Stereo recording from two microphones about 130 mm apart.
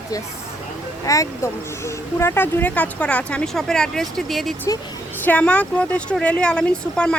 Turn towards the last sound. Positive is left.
turn(degrees=10)  # may be behind; listen again after turning